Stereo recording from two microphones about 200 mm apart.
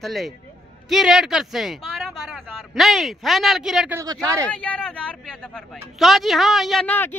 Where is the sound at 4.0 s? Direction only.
15° right (ahead or behind).